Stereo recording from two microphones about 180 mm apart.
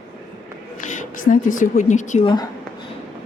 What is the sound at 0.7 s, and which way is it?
Speech, 45° left (ahead or behind).